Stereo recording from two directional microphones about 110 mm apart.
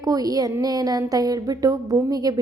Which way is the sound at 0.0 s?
35° right (ahead or behind).